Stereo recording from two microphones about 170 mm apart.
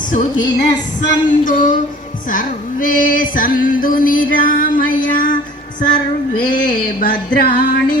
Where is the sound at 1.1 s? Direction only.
50° left (ahead or behind).